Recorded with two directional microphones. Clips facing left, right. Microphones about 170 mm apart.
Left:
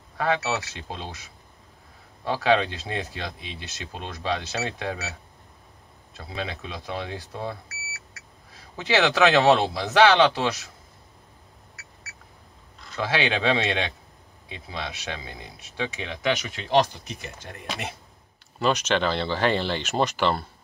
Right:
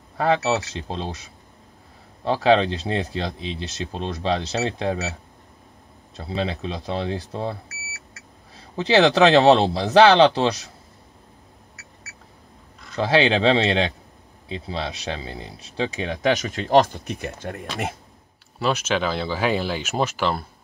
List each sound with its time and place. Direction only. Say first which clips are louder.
0.2 s speech: right 5 dB; 30° right (ahead or behind)
2.2 s speech: right 4 dB; 30° right (ahead or behind)
6.1 s speech: right 7 dB; 30° right (ahead or behind)
8.7 s speech: right 5 dB; 30° right (ahead or behind)
12.9 s speech: right 6 dB; 30° right (ahead or behind); by 17.9 s 50° right (ahead or behind)
18.6 s speech: even; 5° right (ahead or behind)